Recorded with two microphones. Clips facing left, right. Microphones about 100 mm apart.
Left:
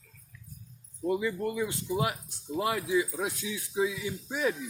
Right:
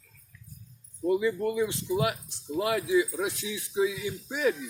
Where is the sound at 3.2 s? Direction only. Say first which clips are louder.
Right 2 dB; 20° right (ahead or behind).